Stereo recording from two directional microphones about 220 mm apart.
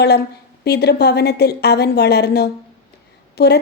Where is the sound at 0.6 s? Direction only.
45° left (ahead or behind).